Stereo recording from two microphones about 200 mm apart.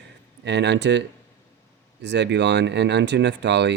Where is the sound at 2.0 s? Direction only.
60° right (ahead or behind).